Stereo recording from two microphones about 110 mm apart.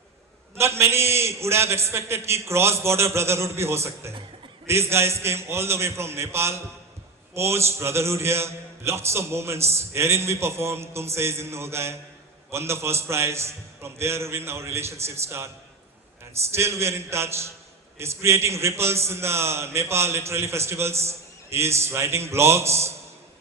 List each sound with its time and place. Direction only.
0.5 s a man's voice: 25° right (ahead or behind)
16.6 s a man's voice: 25° right (ahead or behind)